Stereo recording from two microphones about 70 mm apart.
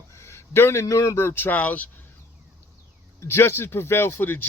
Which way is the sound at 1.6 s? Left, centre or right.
Left.